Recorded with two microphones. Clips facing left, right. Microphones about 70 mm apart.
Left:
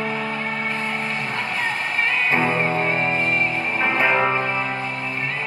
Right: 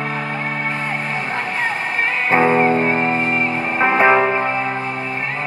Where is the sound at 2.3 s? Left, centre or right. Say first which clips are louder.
Right 10 dB; right.